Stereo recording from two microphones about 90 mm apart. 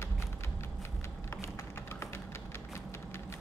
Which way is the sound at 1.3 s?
30° left (ahead or behind).